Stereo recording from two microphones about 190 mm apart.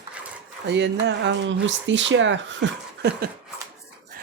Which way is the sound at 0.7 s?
65° right (ahead or behind).